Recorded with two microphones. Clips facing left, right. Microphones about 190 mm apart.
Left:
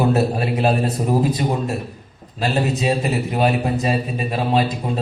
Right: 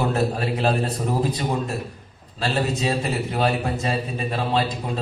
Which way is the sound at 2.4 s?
15° left (ahead or behind).